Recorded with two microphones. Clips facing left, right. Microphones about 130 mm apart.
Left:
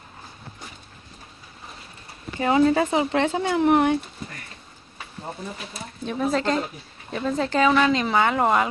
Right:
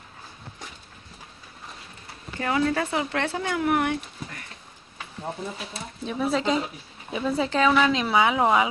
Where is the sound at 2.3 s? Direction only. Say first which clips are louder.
Left 6 dB; 20° left (ahead or behind).